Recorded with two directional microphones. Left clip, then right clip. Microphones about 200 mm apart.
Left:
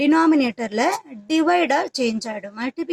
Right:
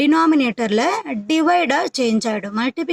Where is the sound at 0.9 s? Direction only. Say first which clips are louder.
Right 3 dB; 25° right (ahead or behind).